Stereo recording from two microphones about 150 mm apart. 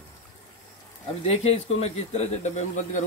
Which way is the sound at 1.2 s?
45° left (ahead or behind).